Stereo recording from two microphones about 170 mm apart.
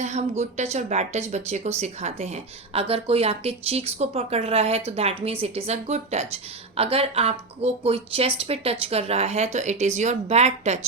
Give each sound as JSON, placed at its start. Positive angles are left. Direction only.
{"t": 0.0, "sound": "speech", "side_deg": -40}